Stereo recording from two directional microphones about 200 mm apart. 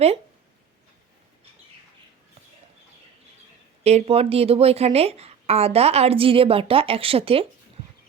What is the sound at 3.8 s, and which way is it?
A woman's voice, 30° right (ahead or behind).